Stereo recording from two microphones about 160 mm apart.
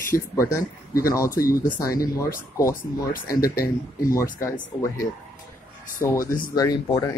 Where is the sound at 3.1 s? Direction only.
70° left (ahead or behind).